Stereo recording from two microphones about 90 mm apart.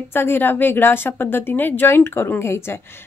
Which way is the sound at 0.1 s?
25° left (ahead or behind).